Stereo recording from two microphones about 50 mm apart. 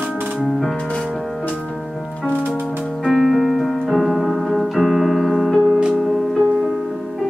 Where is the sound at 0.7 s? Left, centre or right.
Centre.